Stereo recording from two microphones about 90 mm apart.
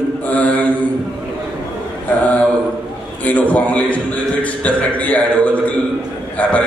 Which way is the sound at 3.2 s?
15° left (ahead or behind).